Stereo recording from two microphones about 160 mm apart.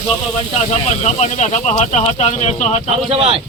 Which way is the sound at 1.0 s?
45° left (ahead or behind).